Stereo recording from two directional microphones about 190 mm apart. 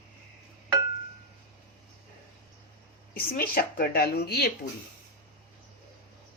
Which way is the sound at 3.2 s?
50° left (ahead or behind).